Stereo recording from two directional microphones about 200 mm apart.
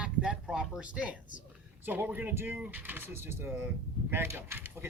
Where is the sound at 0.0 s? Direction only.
5° right (ahead or behind).